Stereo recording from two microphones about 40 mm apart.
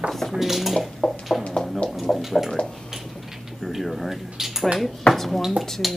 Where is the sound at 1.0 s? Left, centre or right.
Centre.